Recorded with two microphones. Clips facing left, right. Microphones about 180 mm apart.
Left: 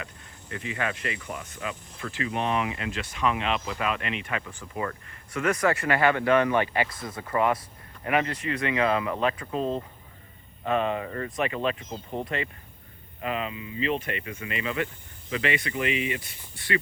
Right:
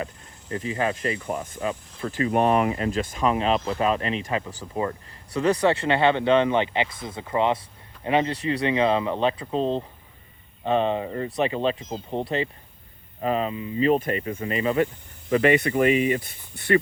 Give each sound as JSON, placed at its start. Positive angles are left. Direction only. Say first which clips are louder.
{"t": 0.0, "sound": "speech", "louder": "right 8 dB", "side_deg": -35}